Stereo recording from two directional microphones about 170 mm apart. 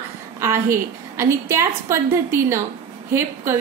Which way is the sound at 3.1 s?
15° right (ahead or behind).